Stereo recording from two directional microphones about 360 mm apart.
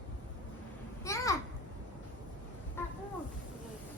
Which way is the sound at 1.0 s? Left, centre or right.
Centre.